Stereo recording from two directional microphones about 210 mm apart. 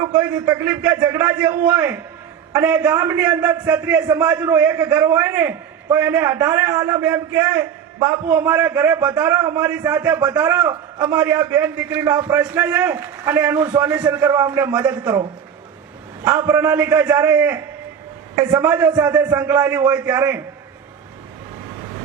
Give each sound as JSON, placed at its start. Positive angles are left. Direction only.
{"t": 0.0, "sound": "a man's voice", "side_deg": -10}
{"t": 14.7, "sound": "a man's voice", "side_deg": -5}
{"t": 16.2, "sound": "a man's voice", "side_deg": -15}